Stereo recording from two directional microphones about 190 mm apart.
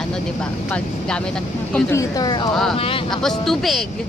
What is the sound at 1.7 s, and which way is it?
Speech, 10° left (ahead or behind).